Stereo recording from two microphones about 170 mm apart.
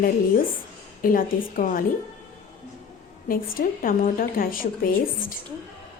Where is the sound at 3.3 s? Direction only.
55° left (ahead or behind).